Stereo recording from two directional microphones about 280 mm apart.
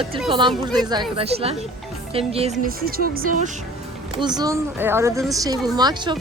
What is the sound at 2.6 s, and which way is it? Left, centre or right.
Speech, right.